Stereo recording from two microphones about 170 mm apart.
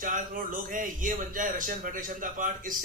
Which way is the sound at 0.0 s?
50° right (ahead or behind).